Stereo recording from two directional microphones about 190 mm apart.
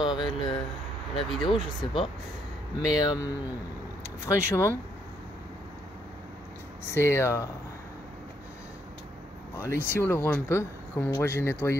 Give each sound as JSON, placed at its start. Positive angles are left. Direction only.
{"t": 0.0, "sound": "a sound", "side_deg": 25}
{"t": 1.3, "sound": "speech", "side_deg": 0}
{"t": 3.0, "sound": "speech", "side_deg": 20}
{"t": 6.9, "sound": "speech", "side_deg": 15}
{"t": 9.6, "sound": "speech", "side_deg": 15}